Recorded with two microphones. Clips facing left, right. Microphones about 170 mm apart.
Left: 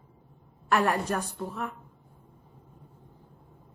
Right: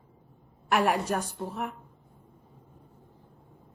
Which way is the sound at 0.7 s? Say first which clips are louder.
Even; 15° right (ahead or behind).